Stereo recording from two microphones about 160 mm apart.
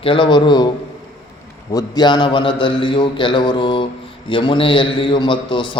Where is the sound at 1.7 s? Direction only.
25° left (ahead or behind).